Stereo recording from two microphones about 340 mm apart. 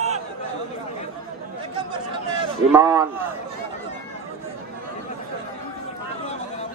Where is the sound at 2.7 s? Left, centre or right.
Centre.